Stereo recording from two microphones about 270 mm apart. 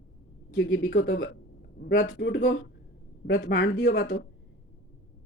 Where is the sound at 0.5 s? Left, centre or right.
Left.